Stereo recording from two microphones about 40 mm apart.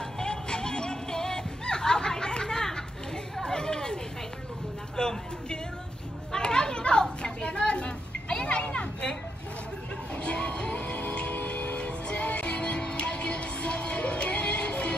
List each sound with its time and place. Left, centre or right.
0.0 s music: centre
3.3 s chatter: centre
4.9 s speech: centre
6.3 s a sound: centre
8.6 s children playing: centre
10.1 s music: left
10.8 s music: left